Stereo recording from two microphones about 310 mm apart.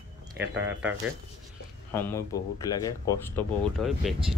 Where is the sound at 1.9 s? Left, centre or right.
Centre.